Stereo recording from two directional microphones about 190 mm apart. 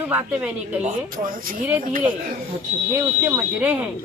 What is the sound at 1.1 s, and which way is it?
Speech, 45° right (ahead or behind).